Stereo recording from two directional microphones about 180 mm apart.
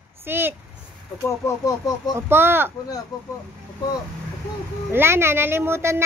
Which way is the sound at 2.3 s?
10° right (ahead or behind).